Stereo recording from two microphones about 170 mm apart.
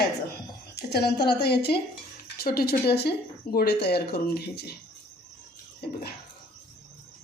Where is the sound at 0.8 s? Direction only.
70° left (ahead or behind).